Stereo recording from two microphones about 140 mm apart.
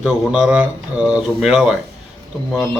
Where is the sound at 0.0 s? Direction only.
5° right (ahead or behind).